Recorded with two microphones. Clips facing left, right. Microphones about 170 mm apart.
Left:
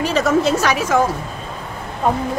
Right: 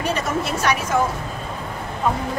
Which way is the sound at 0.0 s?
90° left.